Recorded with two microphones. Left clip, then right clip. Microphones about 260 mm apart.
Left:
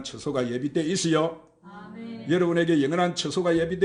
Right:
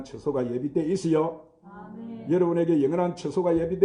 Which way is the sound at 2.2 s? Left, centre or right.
Left.